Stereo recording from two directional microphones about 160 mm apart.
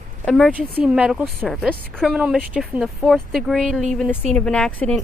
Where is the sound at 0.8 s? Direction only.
5° right (ahead or behind).